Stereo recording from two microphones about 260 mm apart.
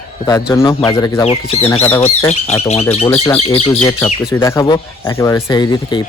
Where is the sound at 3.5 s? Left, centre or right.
Left.